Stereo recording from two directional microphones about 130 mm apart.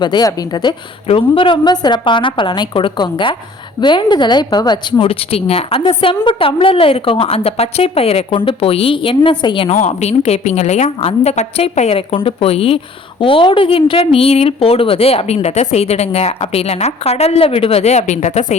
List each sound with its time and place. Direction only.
0.0 s a woman's voice: 30° left (ahead or behind)
9.6 s a woman's voice: 65° left (ahead or behind)